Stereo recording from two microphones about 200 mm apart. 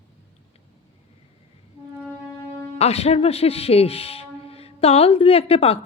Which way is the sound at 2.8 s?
30° left (ahead or behind).